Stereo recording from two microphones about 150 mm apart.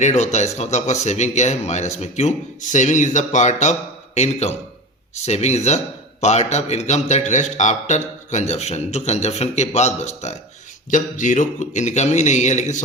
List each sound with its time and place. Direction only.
0.0 s a man's voice: 50° left (ahead or behind)